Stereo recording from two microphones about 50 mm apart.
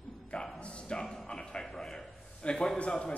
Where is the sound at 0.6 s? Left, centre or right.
Left.